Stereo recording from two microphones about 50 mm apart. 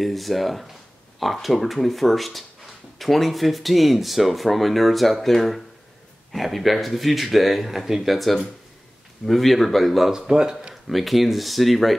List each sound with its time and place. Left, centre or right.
0.0 s speech: centre
10.2 s speech: centre
10.7 s speech: centre